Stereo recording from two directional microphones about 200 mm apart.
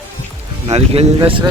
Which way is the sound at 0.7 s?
30° right (ahead or behind).